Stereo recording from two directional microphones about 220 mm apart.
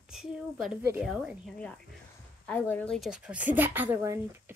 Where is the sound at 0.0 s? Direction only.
5° right (ahead or behind).